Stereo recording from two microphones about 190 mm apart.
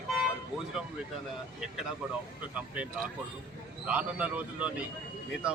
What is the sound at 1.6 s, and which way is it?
Speech, 5° right (ahead or behind).